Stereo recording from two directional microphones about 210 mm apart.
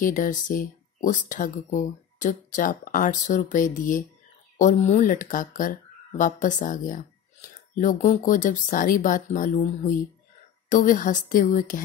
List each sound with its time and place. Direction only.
0.0 s speech: 40° left (ahead or behind)